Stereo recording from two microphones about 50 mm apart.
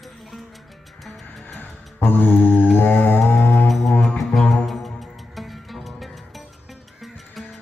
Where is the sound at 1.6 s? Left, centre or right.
Left.